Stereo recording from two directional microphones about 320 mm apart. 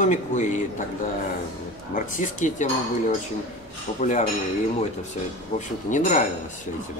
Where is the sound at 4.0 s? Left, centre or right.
Left.